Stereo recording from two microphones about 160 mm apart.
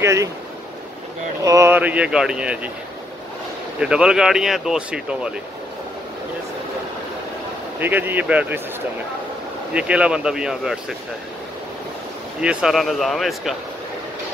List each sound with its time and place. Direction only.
0.0 s speech: 20° right (ahead or behind)
1.4 s speech: 20° right (ahead or behind)
3.8 s speech: 5° right (ahead or behind)
7.8 s speech: 10° right (ahead or behind)
9.8 s speech: 5° right (ahead or behind)
12.4 s speech: 5° right (ahead or behind)